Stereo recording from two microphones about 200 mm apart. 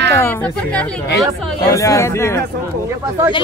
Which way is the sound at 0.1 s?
10° left (ahead or behind).